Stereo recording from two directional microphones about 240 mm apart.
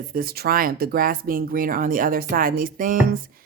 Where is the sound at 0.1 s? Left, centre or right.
Right.